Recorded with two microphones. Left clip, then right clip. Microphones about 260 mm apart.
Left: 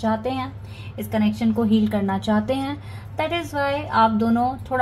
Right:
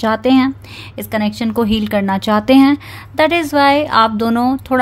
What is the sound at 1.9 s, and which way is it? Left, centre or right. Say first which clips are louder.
Speech: right 8 dB; right.